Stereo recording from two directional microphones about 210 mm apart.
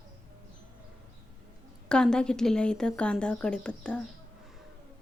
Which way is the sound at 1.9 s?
5° left (ahead or behind).